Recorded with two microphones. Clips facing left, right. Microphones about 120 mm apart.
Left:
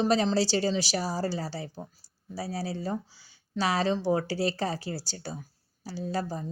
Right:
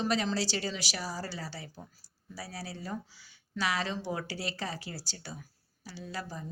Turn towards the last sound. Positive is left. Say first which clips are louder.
# left 8 dB
turn(degrees=35)  # may be behind; listen again after turning